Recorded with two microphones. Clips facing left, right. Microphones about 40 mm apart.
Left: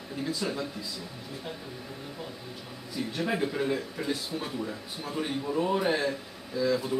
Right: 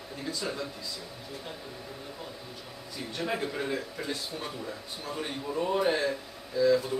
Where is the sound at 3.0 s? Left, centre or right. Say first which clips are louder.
Left 3 dB; centre.